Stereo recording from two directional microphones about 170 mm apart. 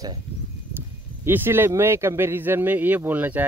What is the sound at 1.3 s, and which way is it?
A man's voice, 10° right (ahead or behind).